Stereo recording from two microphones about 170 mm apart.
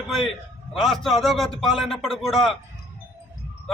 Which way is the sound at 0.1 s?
Centre (ahead or behind).